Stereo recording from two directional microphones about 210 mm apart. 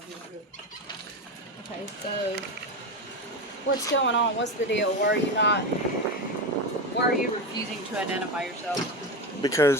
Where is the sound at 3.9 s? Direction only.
60° left (ahead or behind).